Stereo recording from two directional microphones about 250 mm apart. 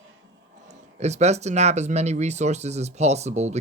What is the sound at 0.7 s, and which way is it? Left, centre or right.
Speech, right.